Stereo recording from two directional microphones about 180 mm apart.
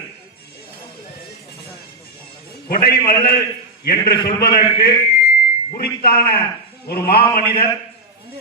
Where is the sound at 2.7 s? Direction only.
60° left (ahead or behind).